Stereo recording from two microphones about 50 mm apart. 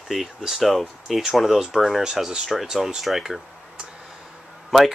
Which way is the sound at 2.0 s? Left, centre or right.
Centre.